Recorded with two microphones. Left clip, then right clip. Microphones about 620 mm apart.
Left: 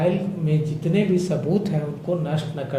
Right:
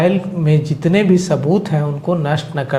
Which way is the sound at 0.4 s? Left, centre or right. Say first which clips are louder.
Right 11 dB; right.